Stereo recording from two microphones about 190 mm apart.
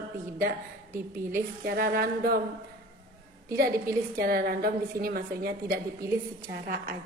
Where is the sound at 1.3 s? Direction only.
55° right (ahead or behind).